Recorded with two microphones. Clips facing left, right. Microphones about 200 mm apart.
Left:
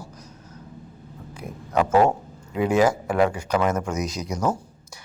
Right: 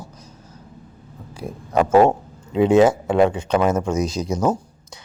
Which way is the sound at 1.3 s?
30° right (ahead or behind).